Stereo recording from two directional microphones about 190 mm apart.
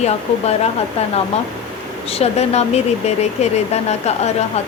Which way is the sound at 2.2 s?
35° left (ahead or behind).